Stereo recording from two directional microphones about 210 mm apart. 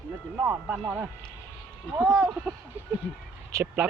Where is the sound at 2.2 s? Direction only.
5° right (ahead or behind).